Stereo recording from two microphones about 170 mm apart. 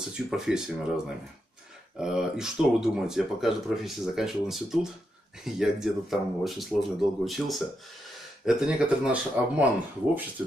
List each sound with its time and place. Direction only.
0.1 s speech: 5° right (ahead or behind)